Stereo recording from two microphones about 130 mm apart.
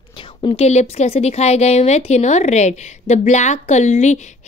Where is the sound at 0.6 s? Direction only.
60° left (ahead or behind).